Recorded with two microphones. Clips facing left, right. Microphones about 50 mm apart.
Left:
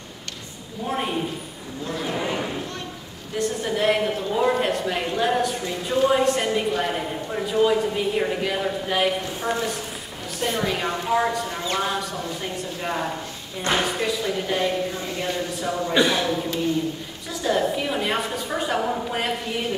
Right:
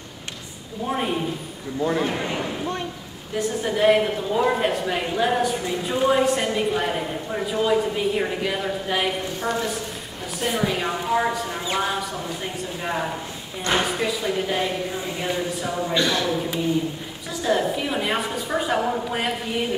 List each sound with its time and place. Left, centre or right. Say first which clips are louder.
0.8 s a man's voice: right 1 dB; centre
1.9 s a man's voice: right 5 dB; right
2.1 s a man's voice: left 1 dB; centre
15.9 s speech: left 3 dB; centre
16.3 s a man's voice: even; centre